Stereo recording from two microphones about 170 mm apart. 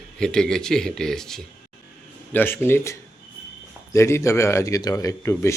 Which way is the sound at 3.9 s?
15° left (ahead or behind).